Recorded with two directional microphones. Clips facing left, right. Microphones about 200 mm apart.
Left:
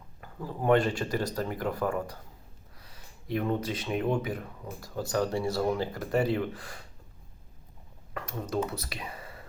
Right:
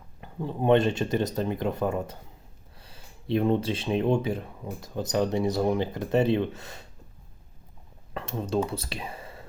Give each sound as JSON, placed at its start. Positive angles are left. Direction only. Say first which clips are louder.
{"t": 0.2, "sound": "speech", "louder": "right 5 dB", "side_deg": -25}
{"t": 8.1, "sound": "speech", "louder": "right 4 dB", "side_deg": -25}